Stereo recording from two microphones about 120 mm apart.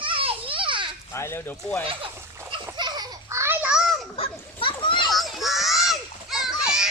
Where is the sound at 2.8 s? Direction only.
35° right (ahead or behind); by 3.7 s 20° right (ahead or behind).